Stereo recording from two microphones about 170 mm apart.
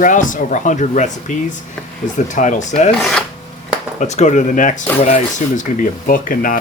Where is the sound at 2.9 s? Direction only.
5° left (ahead or behind).